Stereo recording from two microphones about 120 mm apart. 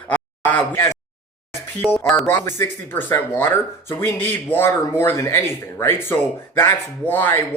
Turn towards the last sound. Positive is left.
turn(degrees=15)  # may be behind; listen again after turning